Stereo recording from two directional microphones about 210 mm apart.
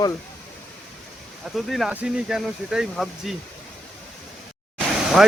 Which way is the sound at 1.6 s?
Centre (ahead or behind).